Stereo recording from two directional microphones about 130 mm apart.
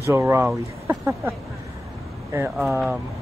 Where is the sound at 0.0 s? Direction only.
20° right (ahead or behind).